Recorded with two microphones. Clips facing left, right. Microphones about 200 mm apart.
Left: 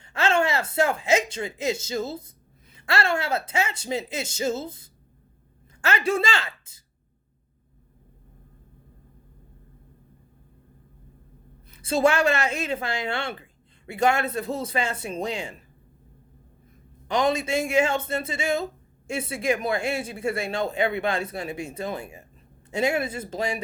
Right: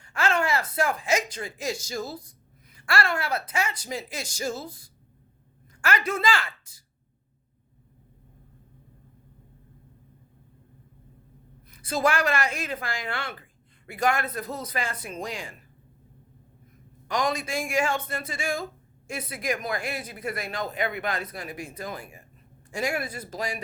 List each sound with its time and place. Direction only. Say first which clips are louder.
0.0 s a man's voice: left 3 dB; 25° left (ahead or behind)
11.7 s a man's voice: left 4 dB; 25° left (ahead or behind)
17.1 s a man's voice: left 4 dB; 25° left (ahead or behind)